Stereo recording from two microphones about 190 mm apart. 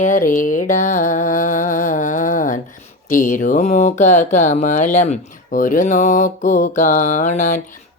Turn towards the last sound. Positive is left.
turn(degrees=40)  # may be behind; listen again after turning